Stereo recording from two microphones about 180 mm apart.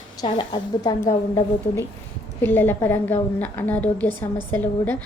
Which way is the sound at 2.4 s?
10° left (ahead or behind).